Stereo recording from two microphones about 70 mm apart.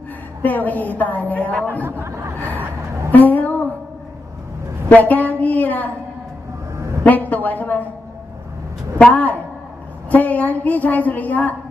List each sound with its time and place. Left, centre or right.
0.4 s a woman's voice: left
1.9 s speech: right
3.1 s a sound: left
4.8 s a woman's voice: left
7.1 s a woman's voice: left
8.9 s a woman's voice: left